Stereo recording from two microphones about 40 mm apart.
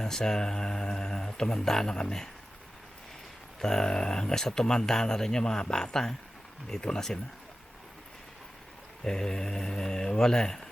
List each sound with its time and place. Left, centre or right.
0.0 s speech: centre
3.6 s speech: centre
9.0 s speech: centre